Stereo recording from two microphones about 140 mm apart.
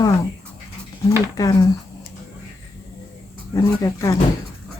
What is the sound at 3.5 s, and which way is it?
Speech, 25° left (ahead or behind).